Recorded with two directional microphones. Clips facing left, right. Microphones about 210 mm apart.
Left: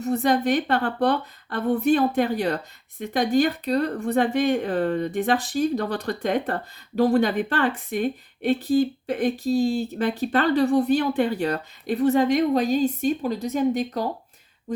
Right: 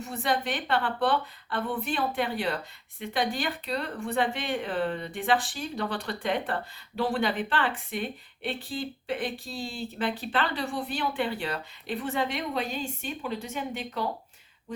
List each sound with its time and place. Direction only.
0.0 s speech: 40° left (ahead or behind)